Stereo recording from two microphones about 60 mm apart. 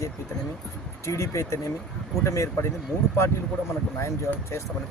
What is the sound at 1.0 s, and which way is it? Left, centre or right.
A man's voice, left.